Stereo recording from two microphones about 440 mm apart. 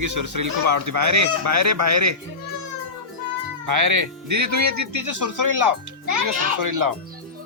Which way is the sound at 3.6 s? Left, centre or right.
Right.